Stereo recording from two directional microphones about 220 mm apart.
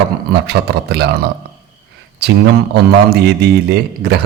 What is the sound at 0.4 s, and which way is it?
Speech, 50° right (ahead or behind).